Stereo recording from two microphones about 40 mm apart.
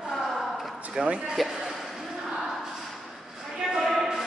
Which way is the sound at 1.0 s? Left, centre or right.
Centre.